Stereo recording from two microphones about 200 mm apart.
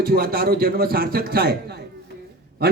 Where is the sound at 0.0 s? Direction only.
50° right (ahead or behind).